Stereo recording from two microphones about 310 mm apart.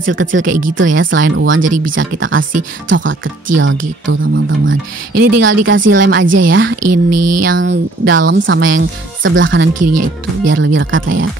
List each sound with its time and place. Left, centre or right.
0.0 s speech: right
0.5 s speech: right
0.7 s speech: right
2.0 s speech: right
5.4 s speech: right
6.8 s a sound: right
7.5 s speech: right
9.8 s speech: right
10.5 s speech: right